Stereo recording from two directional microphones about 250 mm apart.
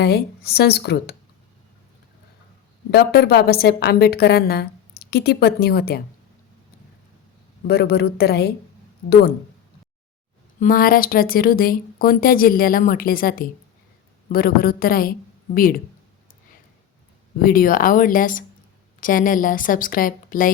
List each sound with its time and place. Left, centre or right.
0.0 s a woman's voice: left
2.9 s a woman's voice: left
7.7 s a woman's voice: left
10.6 s a woman's voice: left
17.4 s a woman's voice: left